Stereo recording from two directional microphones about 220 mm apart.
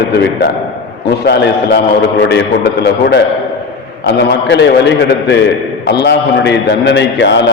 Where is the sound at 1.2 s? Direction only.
50° left (ahead or behind).